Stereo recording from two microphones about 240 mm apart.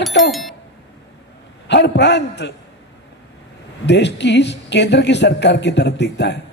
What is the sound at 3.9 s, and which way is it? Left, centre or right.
A man's voice, left.